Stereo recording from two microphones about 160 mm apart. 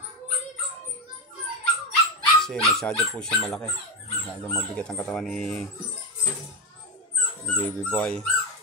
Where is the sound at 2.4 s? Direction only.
Centre (ahead or behind).